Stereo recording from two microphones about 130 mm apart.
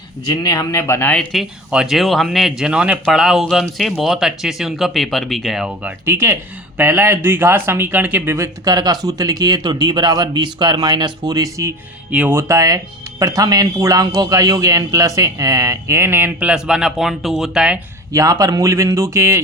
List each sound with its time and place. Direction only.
0.3 s a man's voice: 30° left (ahead or behind)
1.3 s speech: 5° right (ahead or behind)
6.1 s speech: 20° right (ahead or behind)
8.6 s speech: 30° right (ahead or behind)
12.1 s speech: 10° right (ahead or behind)
12.4 s speech: 25° right (ahead or behind); by 17.7 s 5° right (ahead or behind)
18.1 s speech: 25° right (ahead or behind)